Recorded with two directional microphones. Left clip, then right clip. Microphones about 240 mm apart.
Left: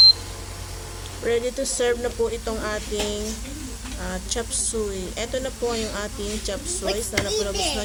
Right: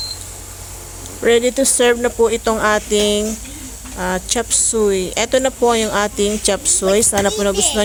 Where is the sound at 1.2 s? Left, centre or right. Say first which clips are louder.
Right 10 dB; right.